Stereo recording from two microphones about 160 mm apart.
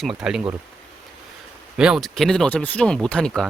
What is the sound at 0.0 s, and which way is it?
Speech, 5° right (ahead or behind).